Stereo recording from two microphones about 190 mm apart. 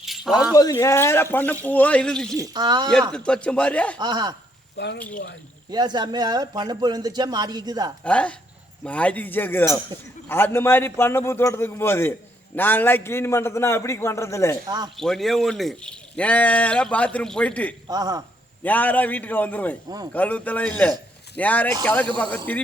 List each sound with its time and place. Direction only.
0.0 s keys jangling: centre (ahead or behind)
0.5 s a man's voice: 20° left (ahead or behind); by 2.4 s 5° left (ahead or behind)
2.4 s a man's voice: 20° right (ahead or behind)
3.1 s speech: 5° left (ahead or behind)
3.9 s a man's voice: 20° right (ahead or behind)
5.7 s a man's voice: 20° right (ahead or behind)
8.0 s a man's voice: 5° left (ahead or behind)
14.9 s speech: centre (ahead or behind)
17.8 s a man's voice: 20° right (ahead or behind)
18.6 s a man's voice: 10° left (ahead or behind)